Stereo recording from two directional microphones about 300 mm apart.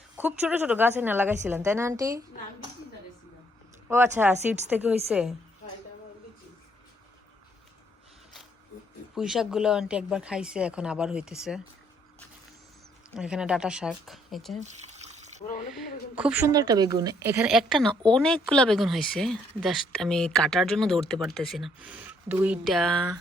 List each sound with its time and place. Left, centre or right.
0.2 s a woman's voice: centre
3.8 s a woman's voice: centre
9.1 s a woman's voice: centre
13.1 s a woman's voice: centre
14.6 s water: right
15.7 s a woman's voice: centre